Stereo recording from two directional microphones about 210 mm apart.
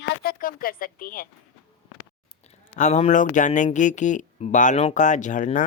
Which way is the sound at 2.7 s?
35° left (ahead or behind).